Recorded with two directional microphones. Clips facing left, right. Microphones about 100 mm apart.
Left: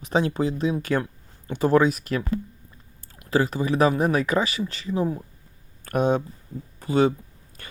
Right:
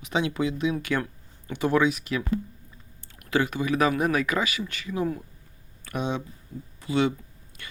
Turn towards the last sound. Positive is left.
turn(degrees=40)  # may be behind; listen again after turning